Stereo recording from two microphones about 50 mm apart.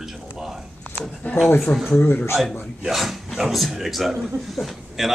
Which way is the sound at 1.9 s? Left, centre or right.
Left.